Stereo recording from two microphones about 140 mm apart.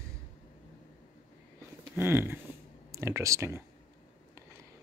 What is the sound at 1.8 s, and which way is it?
Speech, 15° right (ahead or behind).